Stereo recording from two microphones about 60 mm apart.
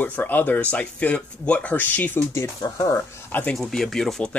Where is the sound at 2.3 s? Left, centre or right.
Left.